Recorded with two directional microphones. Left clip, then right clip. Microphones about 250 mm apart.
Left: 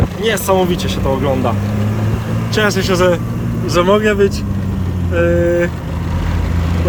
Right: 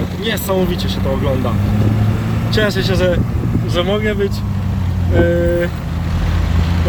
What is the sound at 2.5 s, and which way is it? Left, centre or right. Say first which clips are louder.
Speech: left 2 dB; centre.